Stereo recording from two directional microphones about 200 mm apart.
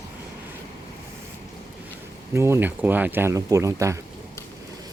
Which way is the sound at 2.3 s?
15° right (ahead or behind).